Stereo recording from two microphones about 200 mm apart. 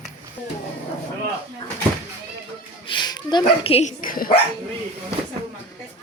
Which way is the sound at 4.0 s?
45° left (ahead or behind).